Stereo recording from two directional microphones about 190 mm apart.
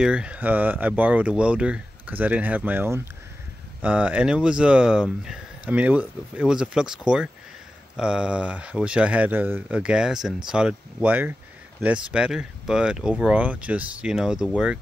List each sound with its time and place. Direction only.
0.0 s speech: 5° right (ahead or behind)